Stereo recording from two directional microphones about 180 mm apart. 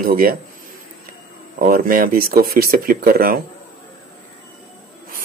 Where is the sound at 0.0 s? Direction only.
50° right (ahead or behind).